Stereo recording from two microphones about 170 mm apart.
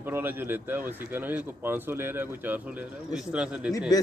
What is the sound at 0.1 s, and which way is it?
A man's voice, 15° right (ahead or behind).